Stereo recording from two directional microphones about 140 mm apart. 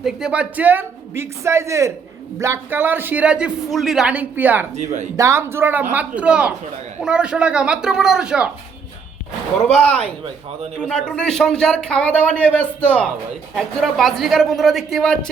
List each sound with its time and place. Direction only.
0.0 s speech: 5° right (ahead or behind)
9.6 s speech: 45° left (ahead or behind)
10.8 s a man's voice: 5° left (ahead or behind)